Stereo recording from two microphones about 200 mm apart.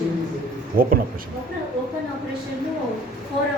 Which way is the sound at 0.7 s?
45° right (ahead or behind).